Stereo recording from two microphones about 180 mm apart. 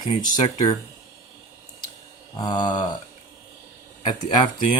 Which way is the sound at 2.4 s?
25° left (ahead or behind).